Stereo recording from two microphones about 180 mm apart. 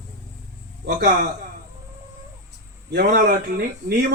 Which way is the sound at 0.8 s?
60° right (ahead or behind).